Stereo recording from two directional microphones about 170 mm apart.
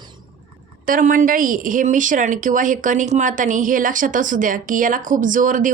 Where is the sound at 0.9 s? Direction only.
50° right (ahead or behind).